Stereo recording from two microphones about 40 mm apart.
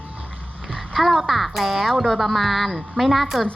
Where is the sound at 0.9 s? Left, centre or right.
Centre.